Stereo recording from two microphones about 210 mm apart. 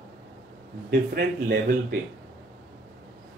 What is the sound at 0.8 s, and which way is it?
A man's voice, 45° right (ahead or behind).